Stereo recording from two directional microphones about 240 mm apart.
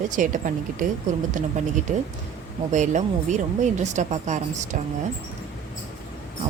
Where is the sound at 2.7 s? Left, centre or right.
Right.